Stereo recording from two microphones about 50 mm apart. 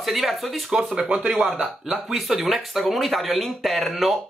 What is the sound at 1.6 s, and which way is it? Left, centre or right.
Speech, centre.